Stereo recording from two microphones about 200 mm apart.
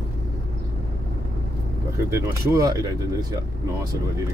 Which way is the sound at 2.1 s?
15° right (ahead or behind).